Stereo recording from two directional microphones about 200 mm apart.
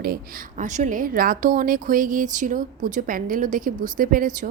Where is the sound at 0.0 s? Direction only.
45° right (ahead or behind).